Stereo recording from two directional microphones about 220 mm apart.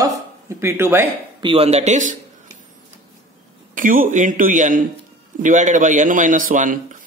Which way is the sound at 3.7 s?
35° right (ahead or behind).